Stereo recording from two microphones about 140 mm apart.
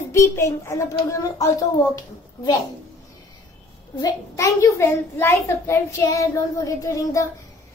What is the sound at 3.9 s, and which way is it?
A child's voice, 25° left (ahead or behind).